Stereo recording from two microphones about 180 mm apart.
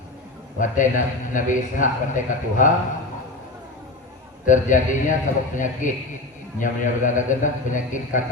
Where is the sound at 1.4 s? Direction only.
45° left (ahead or behind).